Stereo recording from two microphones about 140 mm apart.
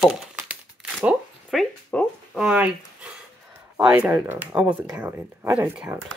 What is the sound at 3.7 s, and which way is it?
Speech, 5° right (ahead or behind).